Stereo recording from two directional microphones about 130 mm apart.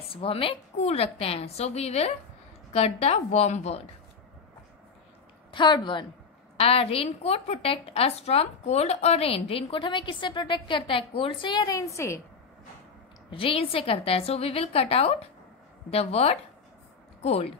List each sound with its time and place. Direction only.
0.1 s a woman's voice: 45° left (ahead or behind)
5.5 s a woman's voice: 35° left (ahead or behind)
6.5 s a woman's voice: 50° left (ahead or behind)
11.5 s a woman's voice: 25° left (ahead or behind)
13.3 s a woman's voice: 45° left (ahead or behind)